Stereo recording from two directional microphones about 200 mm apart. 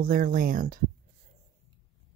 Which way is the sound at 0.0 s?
45° right (ahead or behind).